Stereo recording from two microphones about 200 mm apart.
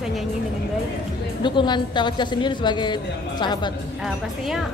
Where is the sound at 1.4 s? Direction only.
20° left (ahead or behind).